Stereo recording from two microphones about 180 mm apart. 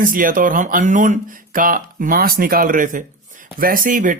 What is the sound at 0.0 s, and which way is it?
Speech, 50° right (ahead or behind).